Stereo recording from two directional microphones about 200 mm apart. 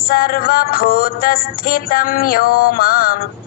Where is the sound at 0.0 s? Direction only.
45° left (ahead or behind).